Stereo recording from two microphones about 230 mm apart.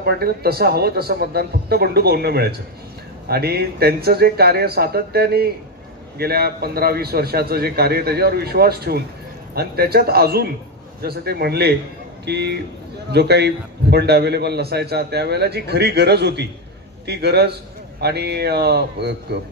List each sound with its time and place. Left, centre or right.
0.0 s a man's voice: right